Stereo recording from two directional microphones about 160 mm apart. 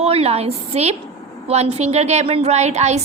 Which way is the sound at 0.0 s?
40° right (ahead or behind).